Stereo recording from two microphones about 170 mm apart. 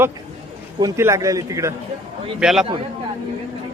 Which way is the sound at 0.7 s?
20° right (ahead or behind).